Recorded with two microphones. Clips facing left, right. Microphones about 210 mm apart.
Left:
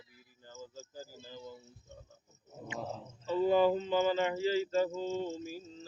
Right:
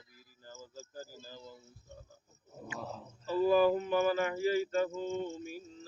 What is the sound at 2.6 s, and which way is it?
Speech, 20° left (ahead or behind).